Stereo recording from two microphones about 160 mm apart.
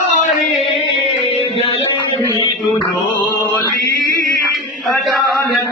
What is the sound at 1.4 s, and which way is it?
Music, 35° left (ahead or behind).